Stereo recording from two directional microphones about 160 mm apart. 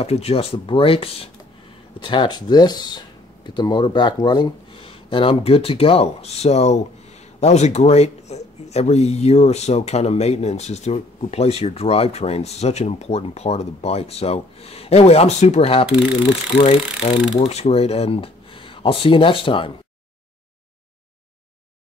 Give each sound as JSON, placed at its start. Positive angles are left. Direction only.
{"t": 0.0, "sound": "speech", "side_deg": 40}